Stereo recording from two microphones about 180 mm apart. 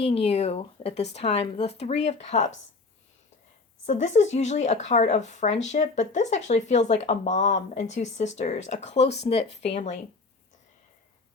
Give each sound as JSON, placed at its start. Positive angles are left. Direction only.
{"t": 0.0, "sound": "speech", "side_deg": 35}
{"t": 3.8, "sound": "speech", "side_deg": 40}